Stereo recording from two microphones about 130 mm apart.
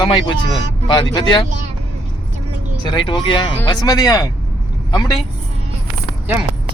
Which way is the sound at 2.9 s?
40° left (ahead or behind).